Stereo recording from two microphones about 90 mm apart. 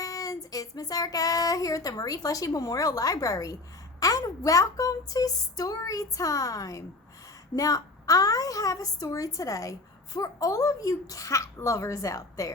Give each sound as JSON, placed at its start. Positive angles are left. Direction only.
{"t": 0.0, "sound": "child singing", "side_deg": 40}